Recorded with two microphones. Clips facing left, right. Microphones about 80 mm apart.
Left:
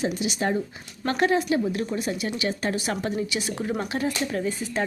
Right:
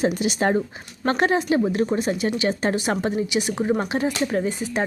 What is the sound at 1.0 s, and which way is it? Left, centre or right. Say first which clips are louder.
A woman's voice: right 2 dB; right.